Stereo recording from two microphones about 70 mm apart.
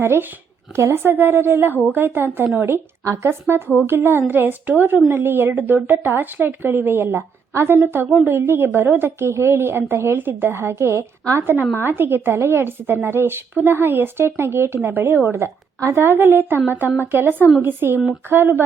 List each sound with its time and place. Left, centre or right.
0.0 s a woman's voice: right
3.0 s speech: right
3.4 s a woman's voice: right
11.8 s a woman's voice: right